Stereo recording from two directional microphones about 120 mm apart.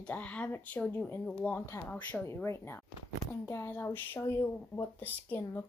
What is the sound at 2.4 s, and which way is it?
A woman's voice, 20° left (ahead or behind).